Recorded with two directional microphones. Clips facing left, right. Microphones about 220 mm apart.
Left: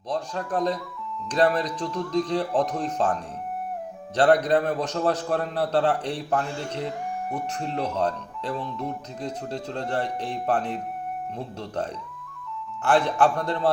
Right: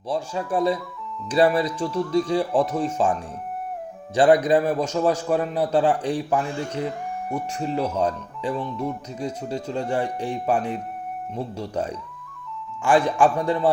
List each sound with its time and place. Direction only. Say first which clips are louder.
0.1 s a man's voice: right 3 dB; 10° right (ahead or behind)